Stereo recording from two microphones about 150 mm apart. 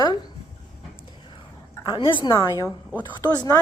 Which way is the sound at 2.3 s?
20° left (ahead or behind).